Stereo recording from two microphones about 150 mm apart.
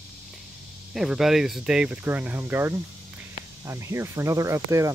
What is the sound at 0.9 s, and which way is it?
Speech, centre (ahead or behind).